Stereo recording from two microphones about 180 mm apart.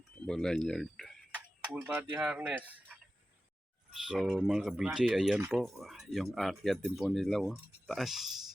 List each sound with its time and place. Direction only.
0.3 s speech: 5° left (ahead or behind)
1.7 s speech: 10° right (ahead or behind)